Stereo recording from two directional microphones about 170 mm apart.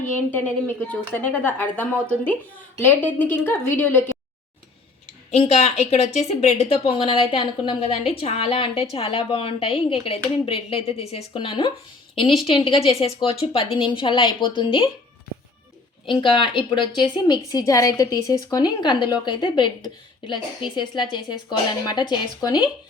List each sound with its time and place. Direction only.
0.3 s speech: 10° left (ahead or behind)
5.3 s a woman's voice: 40° left (ahead or behind)
16.0 s a woman's voice: 30° left (ahead or behind)